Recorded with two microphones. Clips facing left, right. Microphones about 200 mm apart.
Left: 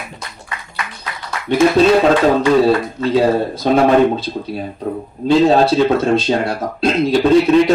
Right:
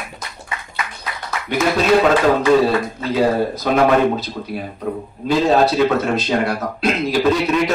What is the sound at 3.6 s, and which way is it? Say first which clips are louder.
Speech: left 5 dB; 30° left (ahead or behind).